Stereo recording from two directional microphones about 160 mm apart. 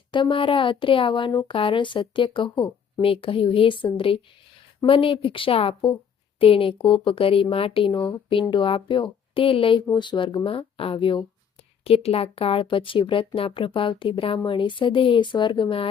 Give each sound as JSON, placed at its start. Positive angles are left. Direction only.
{"t": 0.1, "sound": "speech", "side_deg": 30}